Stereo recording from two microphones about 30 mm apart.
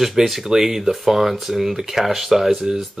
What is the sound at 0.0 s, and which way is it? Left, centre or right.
A man's voice, centre.